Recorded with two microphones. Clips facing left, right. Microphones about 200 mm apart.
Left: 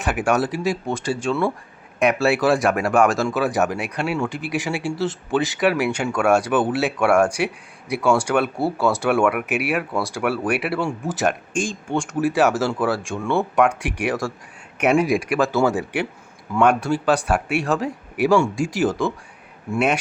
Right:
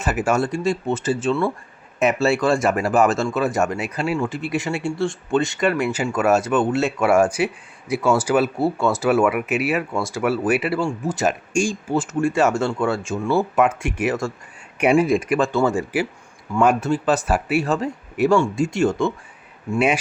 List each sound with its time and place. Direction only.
0.0 s speech: centre (ahead or behind)
11.5 s speech: 10° right (ahead or behind)
15.0 s speech: 15° left (ahead or behind)
15.4 s speech: centre (ahead or behind)